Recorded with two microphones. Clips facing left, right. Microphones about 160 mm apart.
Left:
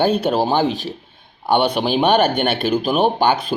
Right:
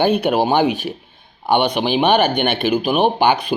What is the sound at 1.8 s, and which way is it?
Speech, 5° right (ahead or behind).